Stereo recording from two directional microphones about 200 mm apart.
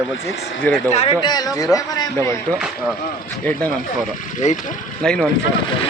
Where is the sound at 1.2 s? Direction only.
20° left (ahead or behind).